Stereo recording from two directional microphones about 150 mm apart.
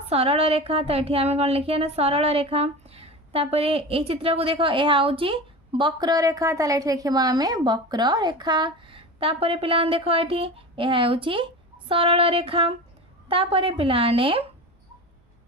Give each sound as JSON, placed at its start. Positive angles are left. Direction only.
{"t": 0.1, "sound": "speech", "side_deg": -40}